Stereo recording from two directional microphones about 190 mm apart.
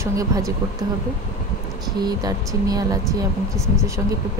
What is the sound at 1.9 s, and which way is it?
Speech, 20° right (ahead or behind).